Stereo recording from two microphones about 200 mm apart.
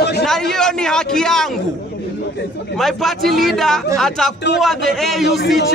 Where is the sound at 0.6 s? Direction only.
5° left (ahead or behind).